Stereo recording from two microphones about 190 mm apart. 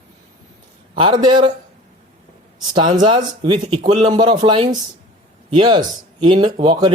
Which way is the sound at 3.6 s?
40° right (ahead or behind).